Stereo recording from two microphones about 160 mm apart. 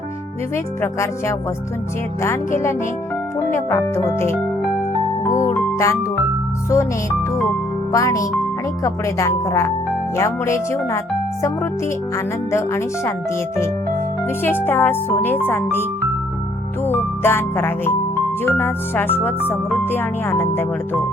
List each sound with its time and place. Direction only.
0.5 s music: 15° left (ahead or behind)
5.4 s music: 20° left (ahead or behind)
7.9 s speech: 20° left (ahead or behind)
10.2 s music: 15° left (ahead or behind)
12.1 s music: 15° left (ahead or behind)
14.4 s music: 15° left (ahead or behind)
16.9 s music: 15° left (ahead or behind)